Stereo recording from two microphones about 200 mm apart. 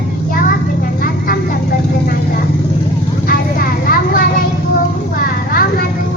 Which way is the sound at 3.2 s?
45° left (ahead or behind).